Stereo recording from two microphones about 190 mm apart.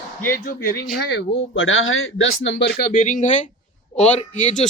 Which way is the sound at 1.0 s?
70° left (ahead or behind).